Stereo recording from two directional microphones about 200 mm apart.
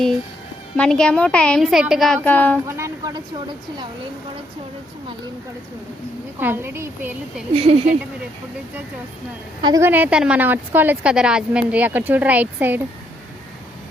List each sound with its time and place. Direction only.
0.8 s a woman's voice: 5° left (ahead or behind)
2.6 s a sound: 15° right (ahead or behind)
6.4 s a woman's voice: 10° right (ahead or behind)
7.5 s speech: 30° right (ahead or behind)
9.6 s a woman's voice: 20° right (ahead or behind)